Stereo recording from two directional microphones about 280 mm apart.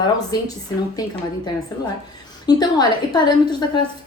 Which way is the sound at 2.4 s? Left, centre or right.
Centre.